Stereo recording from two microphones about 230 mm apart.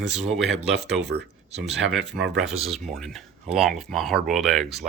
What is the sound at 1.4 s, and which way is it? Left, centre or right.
Speech, right.